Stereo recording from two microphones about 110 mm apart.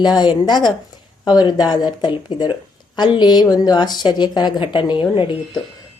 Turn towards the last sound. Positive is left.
turn(degrees=45)  # may be behind; listen again after turning